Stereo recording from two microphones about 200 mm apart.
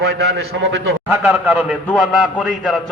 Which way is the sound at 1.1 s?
5° right (ahead or behind).